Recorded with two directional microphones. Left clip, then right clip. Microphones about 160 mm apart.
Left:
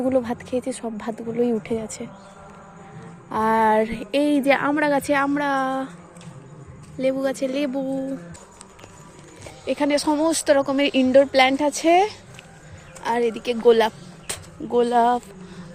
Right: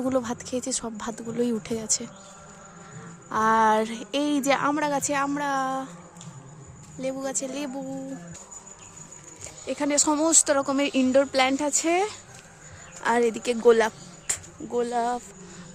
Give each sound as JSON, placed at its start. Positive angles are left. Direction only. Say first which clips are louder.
{"t": 0.0, "sound": "speech", "louder": "left 5 dB", "side_deg": -15}
{"t": 3.2, "sound": "a woman's voice", "louder": "left 2 dB", "side_deg": -10}
{"t": 7.0, "sound": "speech", "louder": "left 8 dB", "side_deg": 0}
{"t": 9.6, "sound": "a woman's voice", "louder": "left 4 dB", "side_deg": -10}
{"t": 13.0, "sound": "speech", "louder": "left 1 dB", "side_deg": -30}
{"t": 14.3, "sound": "speech", "louder": "left 4 dB", "side_deg": 5}